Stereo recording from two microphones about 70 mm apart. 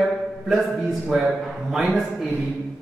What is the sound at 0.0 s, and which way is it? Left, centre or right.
A man's voice, centre.